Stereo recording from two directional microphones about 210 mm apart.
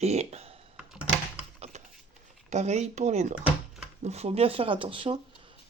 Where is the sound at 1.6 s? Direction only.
30° right (ahead or behind).